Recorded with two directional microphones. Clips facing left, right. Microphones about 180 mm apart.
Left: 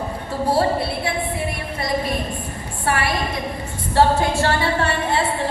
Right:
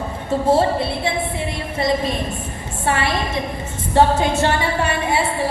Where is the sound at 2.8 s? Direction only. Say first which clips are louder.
Right 1 dB; 25° right (ahead or behind).